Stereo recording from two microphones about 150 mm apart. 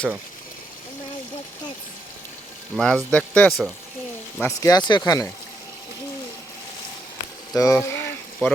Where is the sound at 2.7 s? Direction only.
5° left (ahead or behind).